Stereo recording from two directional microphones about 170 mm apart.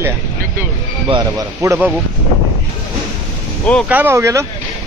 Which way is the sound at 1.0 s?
25° right (ahead or behind).